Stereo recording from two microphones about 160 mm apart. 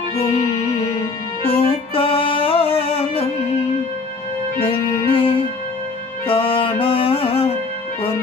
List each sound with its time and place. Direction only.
1.5 s music: 35° left (ahead or behind)
4.6 s music: 35° left (ahead or behind)